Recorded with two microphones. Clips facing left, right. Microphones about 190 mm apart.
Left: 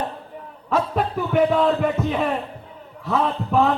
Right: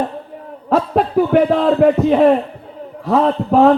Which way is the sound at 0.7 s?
60° right (ahead or behind).